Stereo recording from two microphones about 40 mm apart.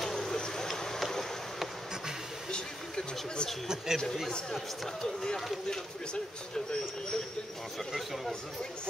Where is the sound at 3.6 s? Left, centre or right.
Centre.